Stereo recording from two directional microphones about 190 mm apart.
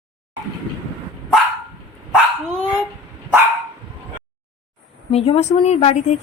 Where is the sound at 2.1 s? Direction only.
Centre (ahead or behind).